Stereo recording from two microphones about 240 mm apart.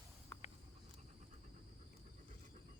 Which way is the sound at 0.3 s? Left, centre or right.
Centre.